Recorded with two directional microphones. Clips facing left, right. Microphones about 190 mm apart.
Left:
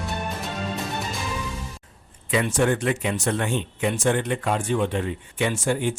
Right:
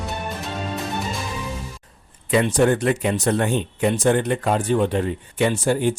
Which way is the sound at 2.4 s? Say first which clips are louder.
Right 4 dB; 35° right (ahead or behind).